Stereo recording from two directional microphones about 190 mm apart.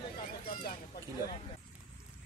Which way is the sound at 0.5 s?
45° left (ahead or behind).